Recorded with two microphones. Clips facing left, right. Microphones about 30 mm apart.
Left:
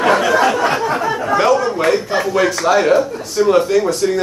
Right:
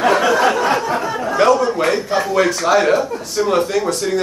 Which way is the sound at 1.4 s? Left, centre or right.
Centre.